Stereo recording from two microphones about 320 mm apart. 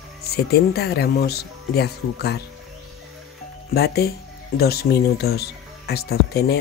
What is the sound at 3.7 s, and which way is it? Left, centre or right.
Speech, left.